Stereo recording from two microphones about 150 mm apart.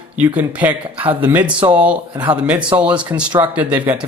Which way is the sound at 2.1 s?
35° right (ahead or behind).